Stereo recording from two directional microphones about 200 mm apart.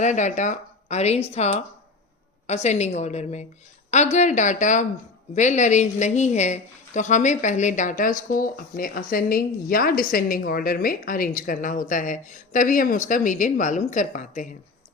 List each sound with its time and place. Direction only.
0.0 s speech: 35° left (ahead or behind)